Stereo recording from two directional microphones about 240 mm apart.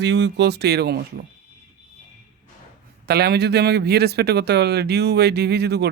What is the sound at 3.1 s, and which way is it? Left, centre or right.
Speech, right.